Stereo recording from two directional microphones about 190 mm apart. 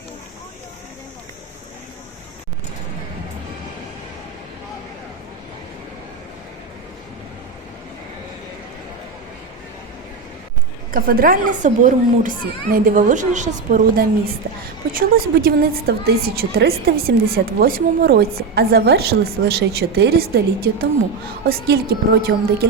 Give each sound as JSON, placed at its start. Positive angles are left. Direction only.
{"t": 10.9, "sound": "a woman's voice", "side_deg": -50}